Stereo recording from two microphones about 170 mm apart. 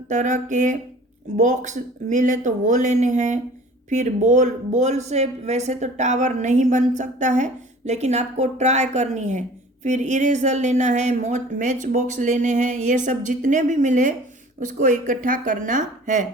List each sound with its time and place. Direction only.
0.1 s speech: 45° right (ahead or behind)